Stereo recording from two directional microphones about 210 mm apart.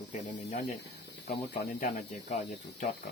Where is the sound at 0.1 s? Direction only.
35° left (ahead or behind).